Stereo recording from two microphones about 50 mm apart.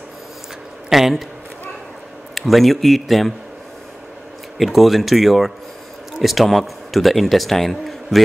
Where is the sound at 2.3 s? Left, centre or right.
Centre.